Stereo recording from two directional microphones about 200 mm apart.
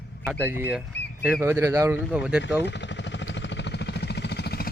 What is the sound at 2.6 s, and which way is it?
Vehicle, 60° left (ahead or behind).